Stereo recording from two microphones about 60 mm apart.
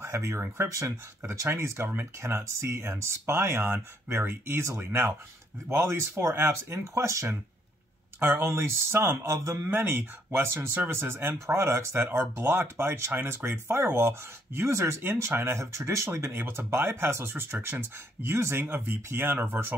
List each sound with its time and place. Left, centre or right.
0.0 s speech: right
1.5 s speech: right
6.9 s speech: right
8.2 s speech: right
9.7 s speech: right
16.1 s speech: right
18.6 s speech: right